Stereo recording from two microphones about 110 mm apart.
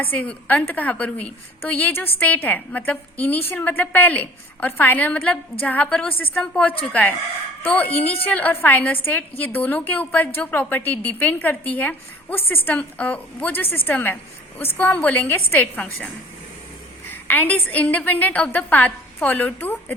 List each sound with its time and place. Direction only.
0.0 s a woman's voice: 15° left (ahead or behind)
17.1 s a woman's voice: 15° left (ahead or behind)